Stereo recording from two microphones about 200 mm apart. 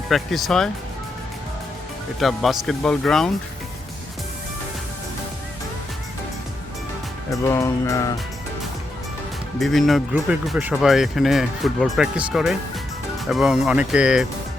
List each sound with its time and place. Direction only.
0.1 s speech: centre (ahead or behind)
2.1 s speech: centre (ahead or behind)
7.3 s music: 15° left (ahead or behind)
9.6 s speech: centre (ahead or behind)